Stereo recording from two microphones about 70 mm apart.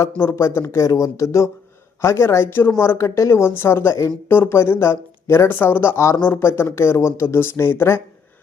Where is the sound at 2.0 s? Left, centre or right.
Left.